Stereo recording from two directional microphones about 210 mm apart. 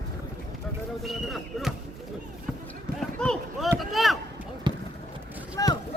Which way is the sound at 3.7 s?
Centre (ahead or behind).